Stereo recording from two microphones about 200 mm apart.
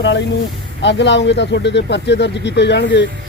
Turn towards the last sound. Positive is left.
turn(degrees=60)  # may be behind; listen again after turning